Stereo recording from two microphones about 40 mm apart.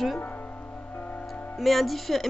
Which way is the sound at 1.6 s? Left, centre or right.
Centre.